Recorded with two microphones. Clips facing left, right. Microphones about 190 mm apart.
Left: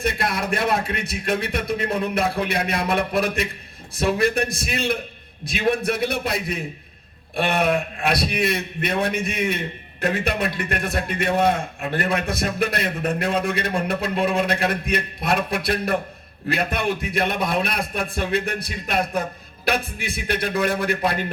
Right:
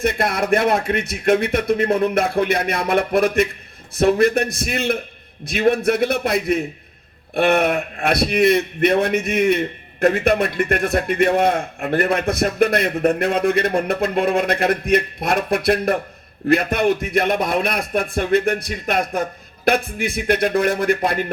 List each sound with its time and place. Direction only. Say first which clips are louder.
0.0 s a man's voice: right 4 dB; 55° right (ahead or behind)